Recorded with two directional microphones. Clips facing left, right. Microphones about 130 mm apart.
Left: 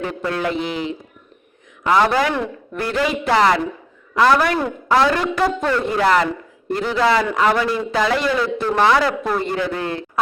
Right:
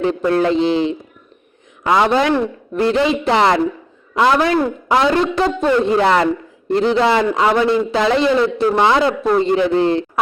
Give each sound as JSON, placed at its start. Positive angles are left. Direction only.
{"t": 0.0, "sound": "a man's voice", "side_deg": -25}